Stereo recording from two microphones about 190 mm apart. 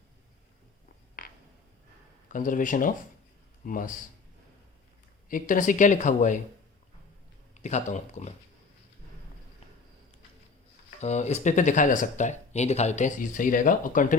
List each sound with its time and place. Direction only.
2.3 s speech: 45° left (ahead or behind)
5.3 s speech: 45° left (ahead or behind)
7.6 s speech: 40° left (ahead or behind)
11.0 s speech: 35° left (ahead or behind)